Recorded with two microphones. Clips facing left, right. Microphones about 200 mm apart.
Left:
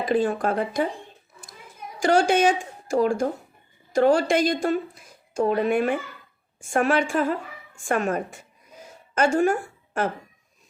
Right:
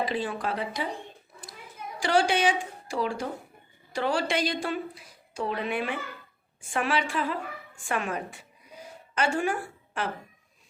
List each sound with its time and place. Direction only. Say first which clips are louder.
0.0 s a woman's voice: left 7 dB; 45° left (ahead or behind)
2.0 s a woman's voice: left 5 dB; 45° left (ahead or behind)
7.8 s a sound: left 7 dB; 45° left (ahead or behind)